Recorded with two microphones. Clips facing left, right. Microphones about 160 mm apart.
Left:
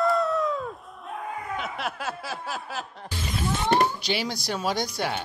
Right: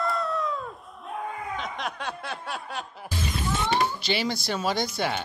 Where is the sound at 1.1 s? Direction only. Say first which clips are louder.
Even; 5° left (ahead or behind).